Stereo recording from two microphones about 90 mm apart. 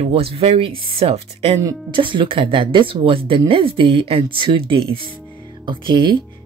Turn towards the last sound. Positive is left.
turn(degrees=-60)  # may be behind; listen again after turning